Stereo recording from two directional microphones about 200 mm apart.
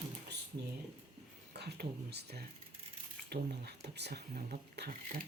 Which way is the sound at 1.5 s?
55° right (ahead or behind).